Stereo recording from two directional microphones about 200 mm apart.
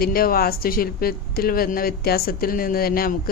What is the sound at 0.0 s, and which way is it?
Speech, 45° left (ahead or behind).